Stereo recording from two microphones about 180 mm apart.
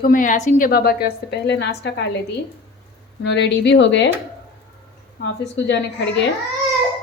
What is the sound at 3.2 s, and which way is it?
Speech, 75° left (ahead or behind).